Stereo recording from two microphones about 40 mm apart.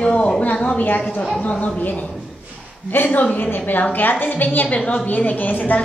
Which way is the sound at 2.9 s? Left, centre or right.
Left.